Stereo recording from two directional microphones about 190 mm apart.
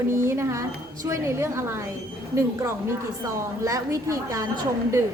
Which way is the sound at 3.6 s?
20° right (ahead or behind).